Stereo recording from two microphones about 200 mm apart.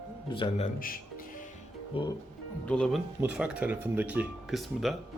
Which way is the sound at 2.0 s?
25° left (ahead or behind).